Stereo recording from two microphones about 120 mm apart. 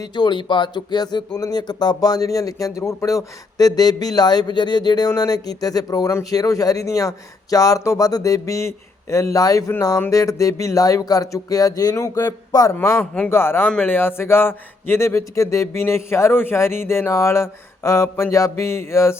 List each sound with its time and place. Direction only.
0.0 s a man's voice: 40° left (ahead or behind)
12.7 s speech: 20° left (ahead or behind)